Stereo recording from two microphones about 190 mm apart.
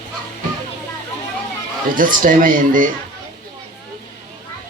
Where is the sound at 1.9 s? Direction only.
45° right (ahead or behind).